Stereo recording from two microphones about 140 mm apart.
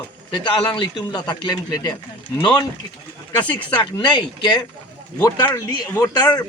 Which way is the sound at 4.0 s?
30° left (ahead or behind).